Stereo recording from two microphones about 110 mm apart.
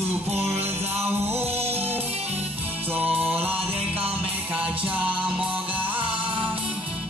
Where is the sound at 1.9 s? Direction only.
20° right (ahead or behind).